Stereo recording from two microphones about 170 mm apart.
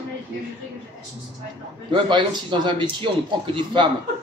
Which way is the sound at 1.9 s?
25° right (ahead or behind).